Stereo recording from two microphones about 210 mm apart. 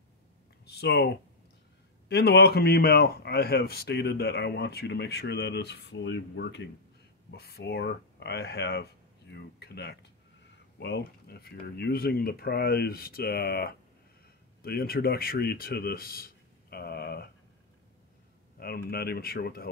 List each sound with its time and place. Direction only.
0.7 s speech: 50° left (ahead or behind)
18.6 s speech: 50° left (ahead or behind)